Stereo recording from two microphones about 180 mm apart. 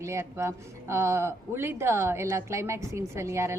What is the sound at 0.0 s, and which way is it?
A woman's voice, 15° right (ahead or behind).